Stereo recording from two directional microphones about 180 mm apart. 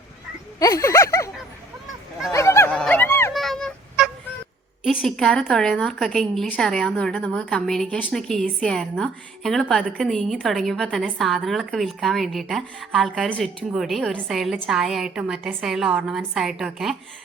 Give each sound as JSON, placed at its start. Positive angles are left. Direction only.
{"t": 0.6, "sound": "speech", "side_deg": 20}
{"t": 2.3, "sound": "a sound", "side_deg": 15}
{"t": 3.3, "sound": "fowl", "side_deg": 0}
{"t": 4.8, "sound": "a woman's voice", "side_deg": 0}